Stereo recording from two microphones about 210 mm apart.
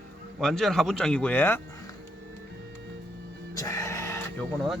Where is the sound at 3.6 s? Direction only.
15° left (ahead or behind).